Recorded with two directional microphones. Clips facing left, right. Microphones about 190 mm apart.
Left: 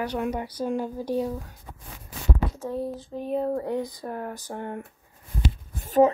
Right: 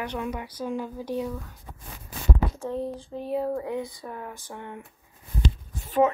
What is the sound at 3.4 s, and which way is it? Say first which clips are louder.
Speech: left 2 dB; 35° left (ahead or behind).